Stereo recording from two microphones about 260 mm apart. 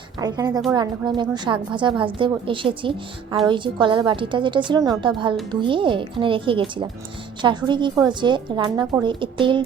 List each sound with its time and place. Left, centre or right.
0.2 s a woman's voice: centre